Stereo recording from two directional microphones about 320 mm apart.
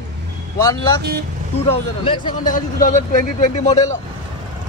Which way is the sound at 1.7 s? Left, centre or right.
Centre.